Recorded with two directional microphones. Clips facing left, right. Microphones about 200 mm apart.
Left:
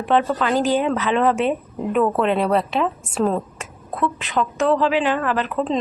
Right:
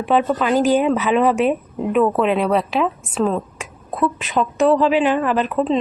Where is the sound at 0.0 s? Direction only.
10° right (ahead or behind).